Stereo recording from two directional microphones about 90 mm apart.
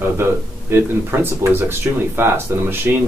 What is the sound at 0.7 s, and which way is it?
Speech, 25° right (ahead or behind).